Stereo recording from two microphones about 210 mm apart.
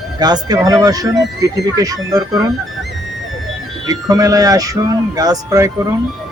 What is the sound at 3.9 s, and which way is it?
Speech, 15° right (ahead or behind).